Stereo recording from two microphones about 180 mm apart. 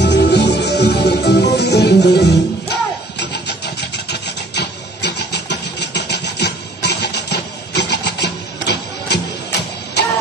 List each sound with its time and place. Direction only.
0.0 s music: 70° left (ahead or behind)